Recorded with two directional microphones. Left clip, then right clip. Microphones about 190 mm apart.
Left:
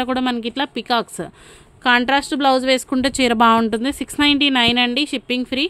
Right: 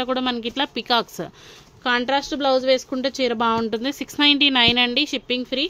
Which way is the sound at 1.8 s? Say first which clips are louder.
Left 5 dB; 35° left (ahead or behind).